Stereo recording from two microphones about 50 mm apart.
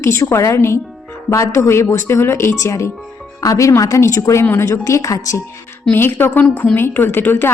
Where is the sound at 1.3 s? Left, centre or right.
Left.